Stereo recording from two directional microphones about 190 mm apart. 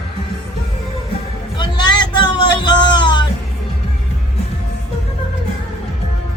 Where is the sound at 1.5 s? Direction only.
25° left (ahead or behind).